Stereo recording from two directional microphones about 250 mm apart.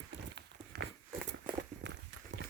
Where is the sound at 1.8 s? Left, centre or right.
Right.